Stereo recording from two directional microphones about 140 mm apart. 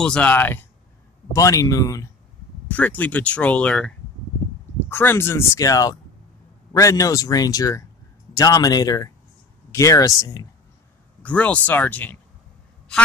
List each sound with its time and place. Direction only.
0.0 s speech: 10° left (ahead or behind); by 2.0 s 25° left (ahead or behind)
2.7 s speech: 10° left (ahead or behind)
11.2 s speech: 10° left (ahead or behind)